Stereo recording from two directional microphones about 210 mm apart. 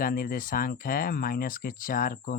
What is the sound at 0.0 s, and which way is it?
Speech, 40° left (ahead or behind).